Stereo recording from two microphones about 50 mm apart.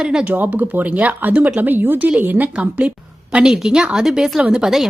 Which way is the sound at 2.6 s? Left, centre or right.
Right.